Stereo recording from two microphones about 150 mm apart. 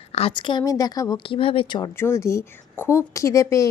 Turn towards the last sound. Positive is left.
turn(degrees=20)  # may be behind; listen again after turning